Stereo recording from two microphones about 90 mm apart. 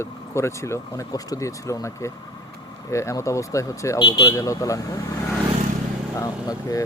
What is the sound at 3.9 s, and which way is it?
Speech, 60° left (ahead or behind).